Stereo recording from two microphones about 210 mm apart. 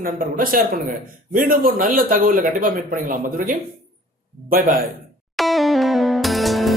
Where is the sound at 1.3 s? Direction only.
40° right (ahead or behind).